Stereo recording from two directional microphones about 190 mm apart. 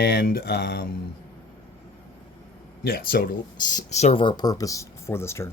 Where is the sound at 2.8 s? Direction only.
55° left (ahead or behind).